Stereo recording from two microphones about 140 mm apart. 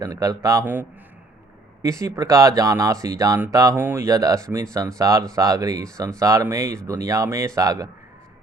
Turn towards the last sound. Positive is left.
turn(degrees=-25)  # may be behind; listen again after turning